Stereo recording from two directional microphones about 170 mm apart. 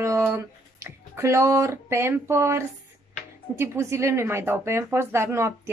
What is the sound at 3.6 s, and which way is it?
A woman's voice, 15° right (ahead or behind).